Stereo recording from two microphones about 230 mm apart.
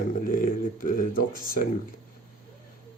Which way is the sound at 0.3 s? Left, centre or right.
Left.